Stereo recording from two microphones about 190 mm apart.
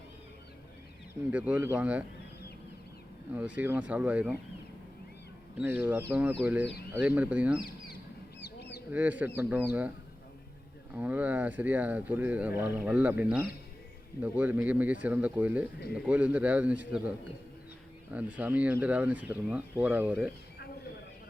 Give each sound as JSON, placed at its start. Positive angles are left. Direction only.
{"t": 1.3, "sound": "speech", "side_deg": -5}
{"t": 3.3, "sound": "speech", "side_deg": -10}
{"t": 5.5, "sound": "speech", "side_deg": -5}
{"t": 8.4, "sound": "duck", "side_deg": 60}
{"t": 8.9, "sound": "speech", "side_deg": -10}
{"t": 10.9, "sound": "speech", "side_deg": -10}
{"t": 18.1, "sound": "speech", "side_deg": -5}